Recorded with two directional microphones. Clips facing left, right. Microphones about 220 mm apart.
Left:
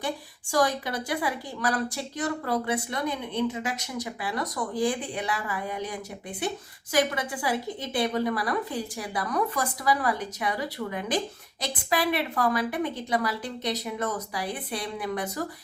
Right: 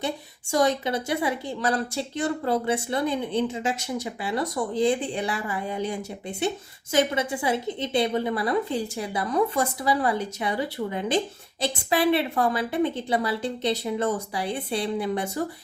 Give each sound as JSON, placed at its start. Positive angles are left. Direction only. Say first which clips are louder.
{"t": 0.5, "sound": "a woman's voice", "louder": "right 3 dB", "side_deg": -25}